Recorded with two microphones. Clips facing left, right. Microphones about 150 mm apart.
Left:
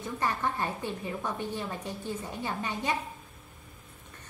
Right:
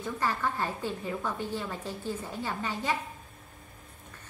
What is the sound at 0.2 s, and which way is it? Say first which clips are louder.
A woman's voice: left 1 dB; 20° left (ahead or behind).